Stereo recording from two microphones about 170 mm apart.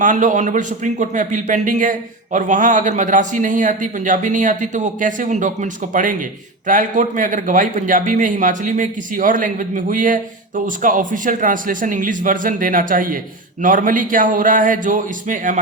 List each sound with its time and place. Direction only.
0.0 s a man's voice: 50° right (ahead or behind)